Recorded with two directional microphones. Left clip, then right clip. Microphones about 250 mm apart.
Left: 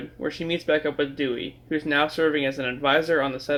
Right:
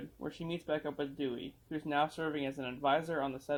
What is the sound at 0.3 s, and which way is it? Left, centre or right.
Speech, right.